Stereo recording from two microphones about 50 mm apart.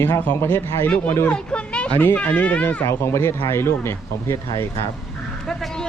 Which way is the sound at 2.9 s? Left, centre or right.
Left.